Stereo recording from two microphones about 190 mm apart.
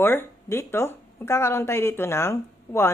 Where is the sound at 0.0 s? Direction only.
10° left (ahead or behind).